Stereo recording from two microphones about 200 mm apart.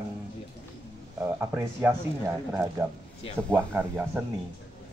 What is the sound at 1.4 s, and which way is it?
Speech, 10° right (ahead or behind).